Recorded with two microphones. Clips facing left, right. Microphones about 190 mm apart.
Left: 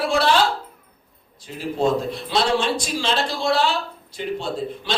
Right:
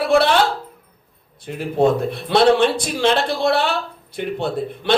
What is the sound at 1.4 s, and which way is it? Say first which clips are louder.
A man's voice: right 5 dB; 60° right (ahead or behind).